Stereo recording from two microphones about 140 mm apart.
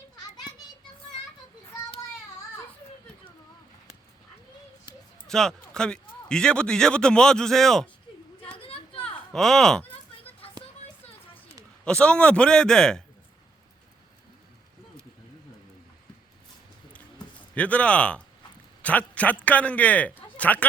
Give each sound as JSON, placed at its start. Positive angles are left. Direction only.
{"t": 5.3, "sound": "a man's voice", "side_deg": 5}
{"t": 8.5, "sound": "a sound", "side_deg": 40}
{"t": 9.3, "sound": "a man's voice", "side_deg": 5}
{"t": 11.9, "sound": "a man's voice", "side_deg": 10}
{"t": 17.5, "sound": "a man's voice", "side_deg": 10}